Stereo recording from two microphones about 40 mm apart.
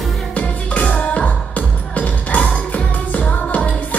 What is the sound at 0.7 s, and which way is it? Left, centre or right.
Music, left.